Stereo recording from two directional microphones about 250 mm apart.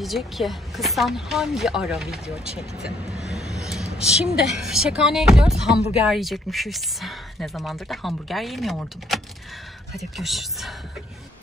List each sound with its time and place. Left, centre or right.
0.0 s a woman's voice: centre